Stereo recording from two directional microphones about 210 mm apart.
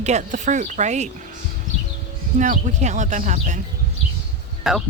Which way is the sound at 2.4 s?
35° right (ahead or behind).